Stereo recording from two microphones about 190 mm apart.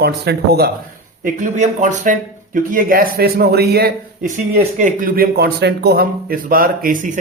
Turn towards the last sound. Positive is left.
turn(degrees=-45)  # may be behind; listen again after turning